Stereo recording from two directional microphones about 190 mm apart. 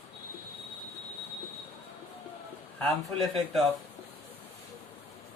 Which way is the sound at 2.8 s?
Centre (ahead or behind).